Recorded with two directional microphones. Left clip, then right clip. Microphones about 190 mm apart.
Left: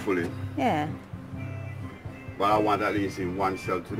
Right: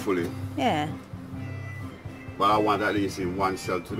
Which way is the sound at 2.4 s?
30° right (ahead or behind).